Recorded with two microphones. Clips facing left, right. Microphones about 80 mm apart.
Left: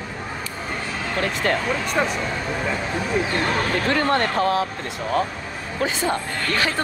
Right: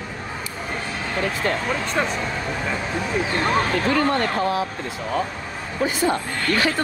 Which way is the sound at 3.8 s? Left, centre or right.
Left.